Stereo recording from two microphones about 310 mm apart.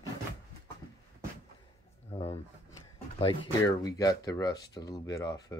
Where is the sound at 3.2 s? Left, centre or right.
Centre.